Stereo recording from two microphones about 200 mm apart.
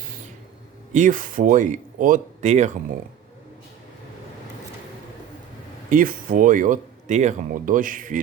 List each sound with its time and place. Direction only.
0.9 s speech: 40° right (ahead or behind)
5.9 s speech: 45° right (ahead or behind)